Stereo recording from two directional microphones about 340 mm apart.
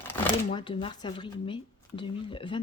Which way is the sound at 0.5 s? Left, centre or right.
Centre.